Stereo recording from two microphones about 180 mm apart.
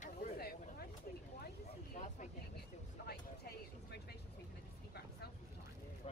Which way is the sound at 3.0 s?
65° left (ahead or behind).